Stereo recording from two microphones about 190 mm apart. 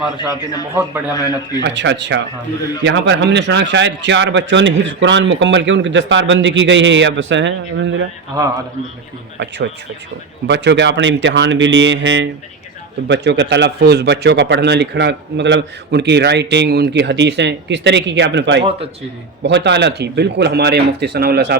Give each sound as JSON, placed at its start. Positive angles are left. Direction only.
{"t": 1.1, "sound": "a man's voice", "side_deg": 20}
{"t": 1.6, "sound": "a man's voice", "side_deg": -70}
{"t": 10.4, "sound": "a man's voice", "side_deg": -65}